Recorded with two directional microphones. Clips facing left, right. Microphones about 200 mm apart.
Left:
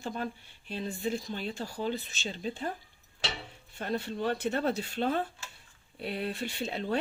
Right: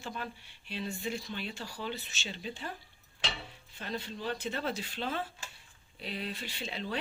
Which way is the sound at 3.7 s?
55° left (ahead or behind).